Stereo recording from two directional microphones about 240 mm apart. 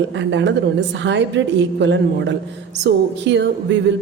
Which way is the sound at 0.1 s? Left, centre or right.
Right.